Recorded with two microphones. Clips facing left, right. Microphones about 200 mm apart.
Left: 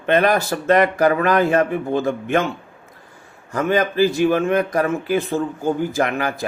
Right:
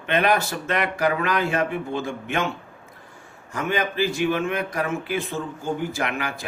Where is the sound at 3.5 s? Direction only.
40° left (ahead or behind).